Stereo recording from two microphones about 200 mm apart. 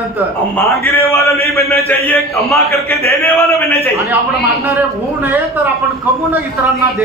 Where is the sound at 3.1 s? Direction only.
15° left (ahead or behind).